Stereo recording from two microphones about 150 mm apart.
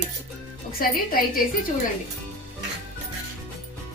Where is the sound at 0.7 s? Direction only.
80° left.